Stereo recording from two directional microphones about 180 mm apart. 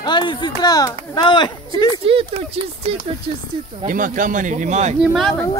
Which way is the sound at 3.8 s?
50° right (ahead or behind).